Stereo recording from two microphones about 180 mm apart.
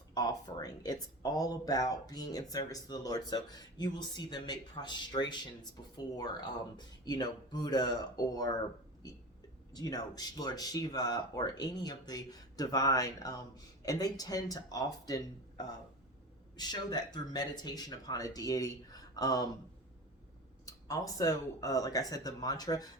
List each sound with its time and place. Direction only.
0.1 s speech: 20° left (ahead or behind)
9.7 s speech: 20° left (ahead or behind)
20.7 s speech: 20° left (ahead or behind)